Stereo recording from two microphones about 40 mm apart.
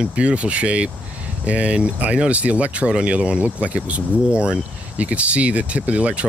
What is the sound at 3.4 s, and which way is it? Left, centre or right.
Speech, right.